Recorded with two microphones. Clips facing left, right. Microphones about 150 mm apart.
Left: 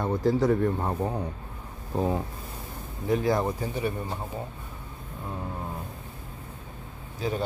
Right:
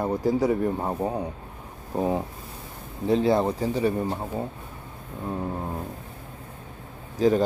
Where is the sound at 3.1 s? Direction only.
25° right (ahead or behind).